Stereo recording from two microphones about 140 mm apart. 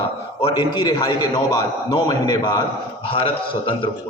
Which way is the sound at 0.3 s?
35° left (ahead or behind).